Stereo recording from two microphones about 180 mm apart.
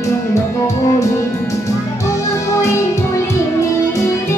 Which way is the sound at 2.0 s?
15° left (ahead or behind).